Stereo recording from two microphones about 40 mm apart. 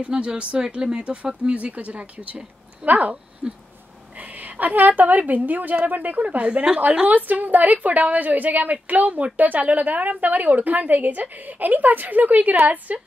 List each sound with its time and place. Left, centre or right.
0.2 s speech: right
4.2 s a woman's voice: right
6.8 s speech: right